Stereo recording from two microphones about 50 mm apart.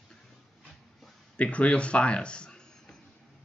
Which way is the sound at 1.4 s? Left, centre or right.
Left.